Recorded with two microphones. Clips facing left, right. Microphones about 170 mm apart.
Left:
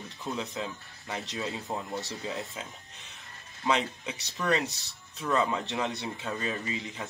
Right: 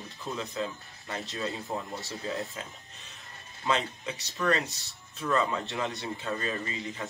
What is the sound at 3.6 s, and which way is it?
Speech, 15° left (ahead or behind).